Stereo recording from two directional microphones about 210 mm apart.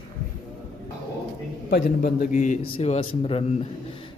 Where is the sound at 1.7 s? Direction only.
50° left (ahead or behind).